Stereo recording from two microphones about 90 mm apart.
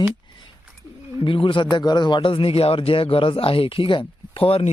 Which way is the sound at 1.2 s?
70° left (ahead or behind).